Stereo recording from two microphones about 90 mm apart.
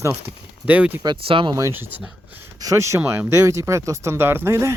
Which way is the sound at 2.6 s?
35° right (ahead or behind).